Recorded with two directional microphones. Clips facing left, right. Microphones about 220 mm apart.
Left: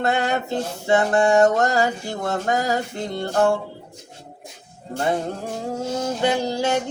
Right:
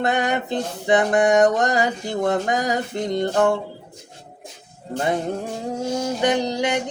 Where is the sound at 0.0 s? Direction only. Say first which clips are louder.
Even; 20° right (ahead or behind).